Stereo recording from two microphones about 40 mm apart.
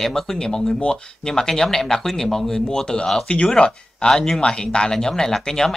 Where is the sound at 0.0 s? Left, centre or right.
Centre.